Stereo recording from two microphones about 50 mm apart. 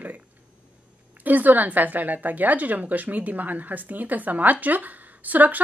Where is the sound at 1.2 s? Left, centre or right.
Right.